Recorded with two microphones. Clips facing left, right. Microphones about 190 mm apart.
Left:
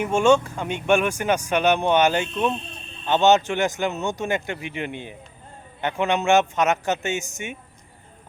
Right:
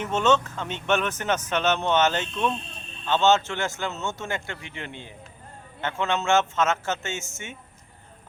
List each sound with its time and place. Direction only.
0.0 s speech: 10° left (ahead or behind)